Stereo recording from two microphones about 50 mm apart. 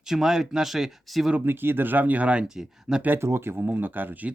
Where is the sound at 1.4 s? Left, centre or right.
Right.